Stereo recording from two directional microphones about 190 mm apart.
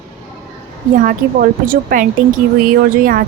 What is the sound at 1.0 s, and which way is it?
A woman's voice, 45° right (ahead or behind).